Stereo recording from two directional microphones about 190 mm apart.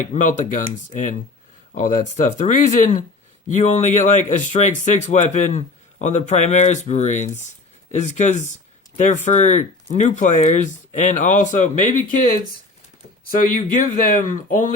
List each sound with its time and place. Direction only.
0.0 s speech: 40° left (ahead or behind)
13.3 s speech: 45° left (ahead or behind)